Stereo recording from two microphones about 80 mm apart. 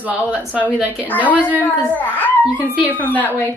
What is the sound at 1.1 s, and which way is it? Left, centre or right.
A child's voice, centre.